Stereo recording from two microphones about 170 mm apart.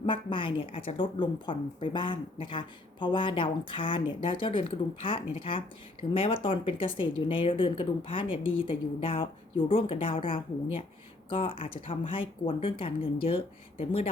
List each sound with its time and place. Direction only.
0.0 s a woman's voice: 30° left (ahead or behind)